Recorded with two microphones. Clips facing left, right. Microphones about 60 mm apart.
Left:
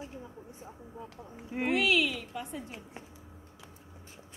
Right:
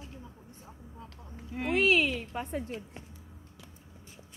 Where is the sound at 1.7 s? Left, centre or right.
Right.